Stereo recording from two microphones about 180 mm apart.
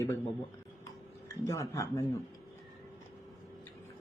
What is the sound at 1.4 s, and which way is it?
Speech, 15° left (ahead or behind).